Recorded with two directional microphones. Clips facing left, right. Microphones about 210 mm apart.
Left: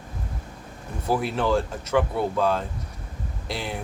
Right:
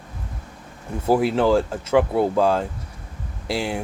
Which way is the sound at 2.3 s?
30° right (ahead or behind).